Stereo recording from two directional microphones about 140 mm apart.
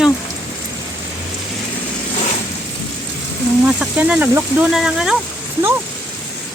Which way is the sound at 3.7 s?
10° right (ahead or behind).